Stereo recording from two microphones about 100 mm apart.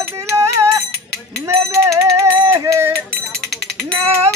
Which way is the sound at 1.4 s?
30° right (ahead or behind).